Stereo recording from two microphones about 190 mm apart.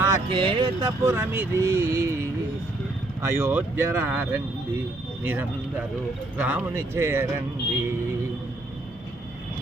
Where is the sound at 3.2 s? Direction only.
15° right (ahead or behind).